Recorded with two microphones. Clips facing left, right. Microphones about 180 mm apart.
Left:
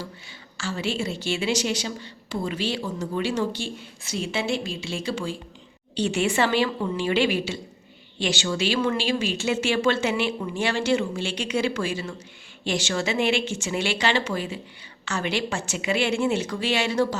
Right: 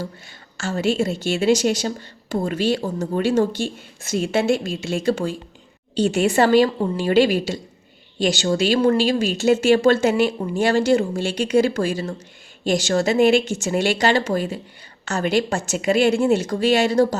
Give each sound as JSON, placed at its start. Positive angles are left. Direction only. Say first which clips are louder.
{"t": 0.0, "sound": "a woman's voice", "louder": "right 6 dB", "side_deg": -45}